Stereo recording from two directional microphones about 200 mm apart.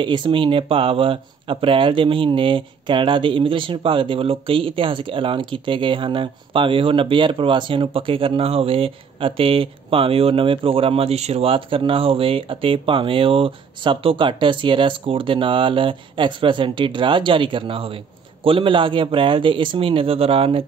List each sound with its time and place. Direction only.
0.0 s speech: 25° right (ahead or behind)